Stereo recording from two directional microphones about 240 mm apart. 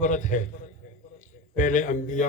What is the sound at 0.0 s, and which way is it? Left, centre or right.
Speech, left.